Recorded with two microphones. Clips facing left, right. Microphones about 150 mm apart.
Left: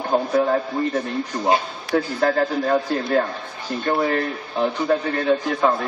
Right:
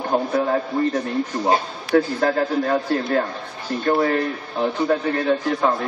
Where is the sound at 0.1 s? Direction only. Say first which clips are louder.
Left 1 dB; centre (ahead or behind).